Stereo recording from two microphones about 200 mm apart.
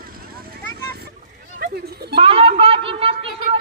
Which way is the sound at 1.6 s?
50° right (ahead or behind).